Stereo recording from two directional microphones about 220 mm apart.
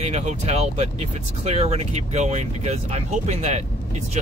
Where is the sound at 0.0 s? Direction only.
30° right (ahead or behind).